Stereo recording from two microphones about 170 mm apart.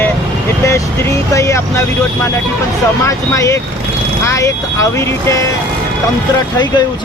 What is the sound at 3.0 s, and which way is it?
Speech, 15° left (ahead or behind).